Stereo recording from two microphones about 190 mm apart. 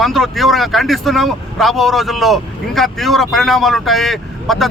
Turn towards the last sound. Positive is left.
turn(degrees=0)  # may be behind; listen again after turning